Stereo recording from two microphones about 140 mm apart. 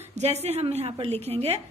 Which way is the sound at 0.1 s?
50° right (ahead or behind).